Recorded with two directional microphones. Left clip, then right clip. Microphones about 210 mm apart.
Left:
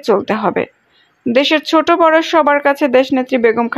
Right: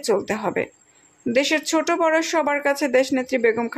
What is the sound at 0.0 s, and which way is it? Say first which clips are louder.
Speech: left 8 dB; 20° left (ahead or behind).